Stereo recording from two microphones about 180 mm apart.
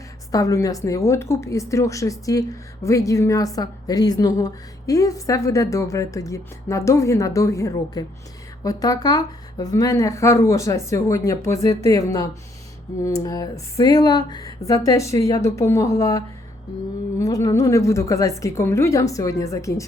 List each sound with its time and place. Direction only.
0.3 s a woman's voice: 20° left (ahead or behind)